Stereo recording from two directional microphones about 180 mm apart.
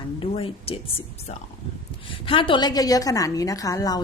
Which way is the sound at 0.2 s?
30° left (ahead or behind).